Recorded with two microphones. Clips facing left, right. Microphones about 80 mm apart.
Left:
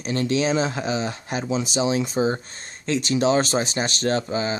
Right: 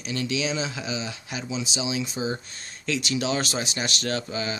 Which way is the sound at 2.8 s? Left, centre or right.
Left.